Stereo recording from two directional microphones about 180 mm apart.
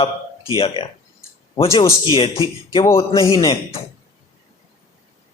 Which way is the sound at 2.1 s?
30° left (ahead or behind).